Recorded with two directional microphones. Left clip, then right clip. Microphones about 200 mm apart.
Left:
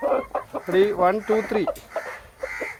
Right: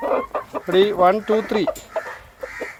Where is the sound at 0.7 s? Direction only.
20° right (ahead or behind).